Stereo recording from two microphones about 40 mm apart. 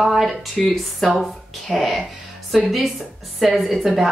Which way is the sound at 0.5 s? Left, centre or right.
Centre.